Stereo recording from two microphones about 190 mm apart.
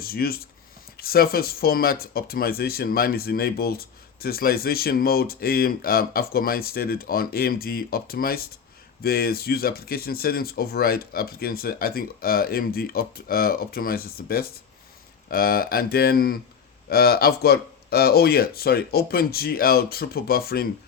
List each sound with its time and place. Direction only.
0.0 s speech: 55° left (ahead or behind)